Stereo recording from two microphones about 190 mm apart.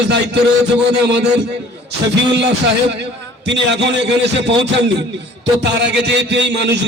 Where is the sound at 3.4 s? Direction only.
65° right (ahead or behind).